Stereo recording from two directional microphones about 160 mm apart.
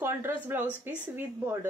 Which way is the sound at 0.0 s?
15° right (ahead or behind).